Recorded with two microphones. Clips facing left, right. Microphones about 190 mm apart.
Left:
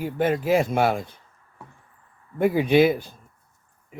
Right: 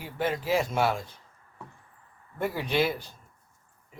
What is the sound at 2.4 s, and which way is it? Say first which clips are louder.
Speech: left 9 dB; 55° left (ahead or behind).